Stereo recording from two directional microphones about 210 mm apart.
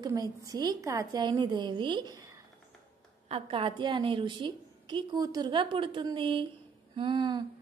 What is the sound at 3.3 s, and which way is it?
A woman's voice, 25° right (ahead or behind).